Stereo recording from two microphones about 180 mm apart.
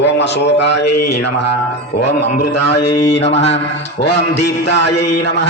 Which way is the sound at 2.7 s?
70° left (ahead or behind).